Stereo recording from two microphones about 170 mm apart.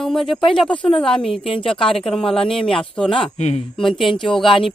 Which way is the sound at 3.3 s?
40° left (ahead or behind).